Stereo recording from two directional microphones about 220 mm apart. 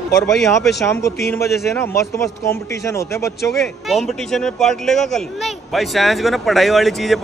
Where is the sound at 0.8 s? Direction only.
15° left (ahead or behind).